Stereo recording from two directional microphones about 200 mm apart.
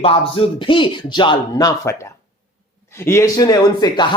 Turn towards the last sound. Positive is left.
turn(degrees=20)  # may be behind; listen again after turning